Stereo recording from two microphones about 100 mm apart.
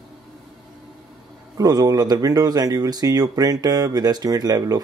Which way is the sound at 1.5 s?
40° right (ahead or behind).